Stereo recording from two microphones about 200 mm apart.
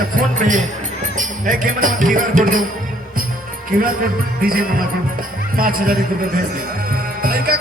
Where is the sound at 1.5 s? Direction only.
40° right (ahead or behind).